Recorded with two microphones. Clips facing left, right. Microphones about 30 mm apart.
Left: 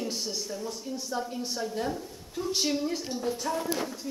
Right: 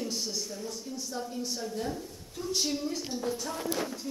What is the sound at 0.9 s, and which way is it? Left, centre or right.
A woman's voice, left.